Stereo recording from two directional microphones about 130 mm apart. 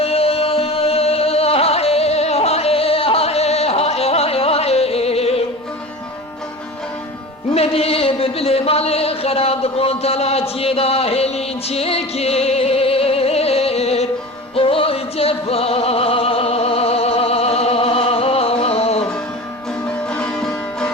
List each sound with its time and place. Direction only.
0.0 s music: 50° left (ahead or behind)
7.5 s a sound: 50° left (ahead or behind)
14.5 s music: 45° left (ahead or behind)
19.9 s music: 10° left (ahead or behind)